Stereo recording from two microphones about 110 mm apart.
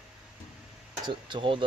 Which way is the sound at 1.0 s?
45° right (ahead or behind).